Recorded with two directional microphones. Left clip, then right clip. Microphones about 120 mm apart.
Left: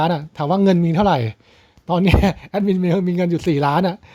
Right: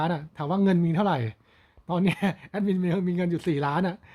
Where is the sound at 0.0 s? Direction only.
35° left (ahead or behind).